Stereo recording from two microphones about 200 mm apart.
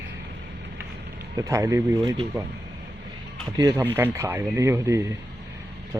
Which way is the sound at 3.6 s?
15° right (ahead or behind).